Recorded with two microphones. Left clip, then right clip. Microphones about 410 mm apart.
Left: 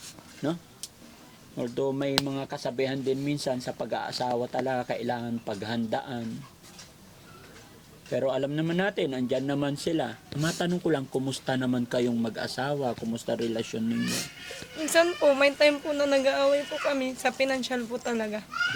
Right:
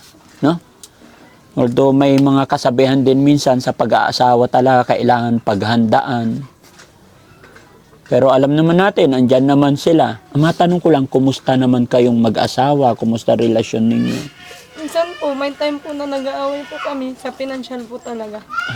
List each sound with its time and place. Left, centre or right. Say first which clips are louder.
1.5 s speech: right 17 dB; right
8.1 s speech: right 16 dB; right
14.9 s a woman's voice: right 3 dB; left